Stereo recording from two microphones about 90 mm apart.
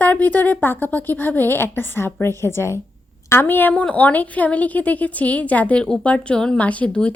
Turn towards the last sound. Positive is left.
turn(degrees=15)  # may be behind; listen again after turning